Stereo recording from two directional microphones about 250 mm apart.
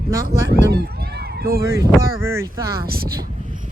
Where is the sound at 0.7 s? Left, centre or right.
Right.